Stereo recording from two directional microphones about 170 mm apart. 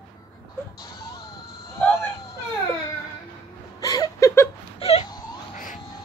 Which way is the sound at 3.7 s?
20° left (ahead or behind).